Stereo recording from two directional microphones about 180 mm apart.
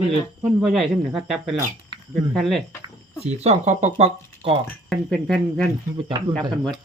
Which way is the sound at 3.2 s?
35° right (ahead or behind).